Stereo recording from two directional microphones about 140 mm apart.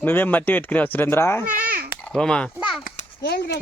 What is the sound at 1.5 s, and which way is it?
Babbling, 90° right.